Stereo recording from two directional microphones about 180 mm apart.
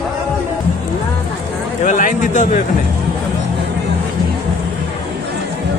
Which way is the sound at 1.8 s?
45° left (ahead or behind).